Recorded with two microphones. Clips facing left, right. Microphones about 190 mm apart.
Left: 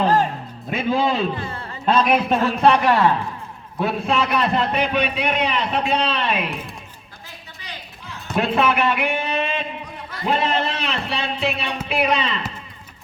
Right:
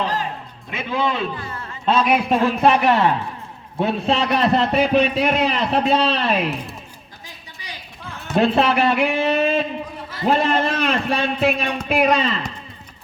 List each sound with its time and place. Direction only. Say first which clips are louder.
0.0 s a sound: left 6 dB; 50° left (ahead or behind)
0.7 s a man's voice: left 3 dB; 40° left (ahead or behind)
1.8 s speech: even; 5° right (ahead or behind)
2.8 s a man's voice: even; 20° right (ahead or behind); by 6.4 s 40° right (ahead or behind)
8.4 s a man's voice: right 3 dB; 35° right (ahead or behind)